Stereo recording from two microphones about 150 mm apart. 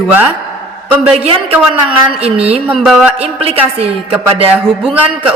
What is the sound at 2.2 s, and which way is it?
Speech, 40° right (ahead or behind).